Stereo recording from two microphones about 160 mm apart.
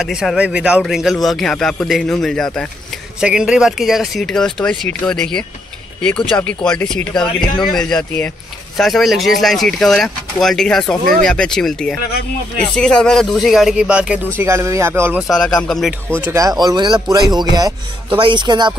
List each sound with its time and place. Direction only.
0.0 s a man's voice: centre (ahead or behind)
15.2 s a man's voice: 5° left (ahead or behind)
16.3 s speech: 20° right (ahead or behind)